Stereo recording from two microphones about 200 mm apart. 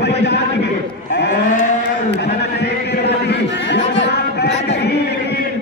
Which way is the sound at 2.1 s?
55° left (ahead or behind).